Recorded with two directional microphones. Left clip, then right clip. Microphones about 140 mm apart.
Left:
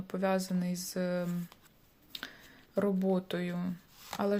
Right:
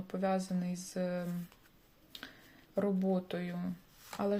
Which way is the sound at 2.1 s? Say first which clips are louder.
Left 6 dB; 25° left (ahead or behind).